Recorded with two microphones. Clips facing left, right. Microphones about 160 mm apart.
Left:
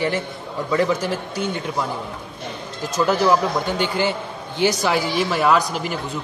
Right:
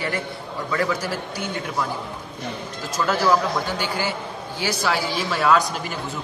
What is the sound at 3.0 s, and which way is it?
A man's voice, 20° left (ahead or behind).